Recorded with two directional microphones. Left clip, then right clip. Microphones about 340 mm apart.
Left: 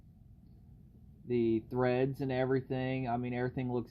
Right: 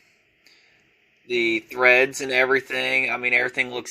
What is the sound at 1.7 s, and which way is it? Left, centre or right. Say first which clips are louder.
Speech: right 15 dB; centre.